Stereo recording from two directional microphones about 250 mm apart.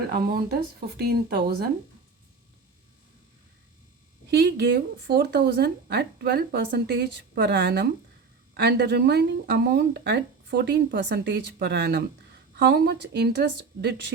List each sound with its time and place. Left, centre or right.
0.1 s speech: right
4.3 s speech: right